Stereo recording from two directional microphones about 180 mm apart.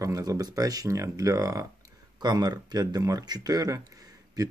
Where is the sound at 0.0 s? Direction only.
20° right (ahead or behind).